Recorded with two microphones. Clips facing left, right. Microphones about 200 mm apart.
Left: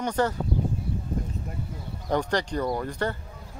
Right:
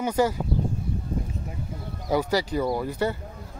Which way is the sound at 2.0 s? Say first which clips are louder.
Right 2 dB; 5° right (ahead or behind).